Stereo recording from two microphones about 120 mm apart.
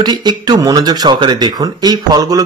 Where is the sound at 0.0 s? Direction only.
35° right (ahead or behind).